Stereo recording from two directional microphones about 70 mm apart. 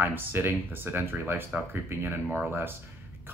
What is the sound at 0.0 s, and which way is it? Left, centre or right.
Speech, right.